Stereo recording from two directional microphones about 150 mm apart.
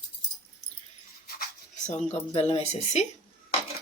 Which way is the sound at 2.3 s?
45° left (ahead or behind).